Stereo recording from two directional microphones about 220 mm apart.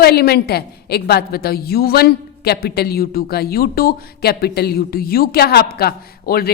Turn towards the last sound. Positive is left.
turn(degrees=45)  # may be behind; listen again after turning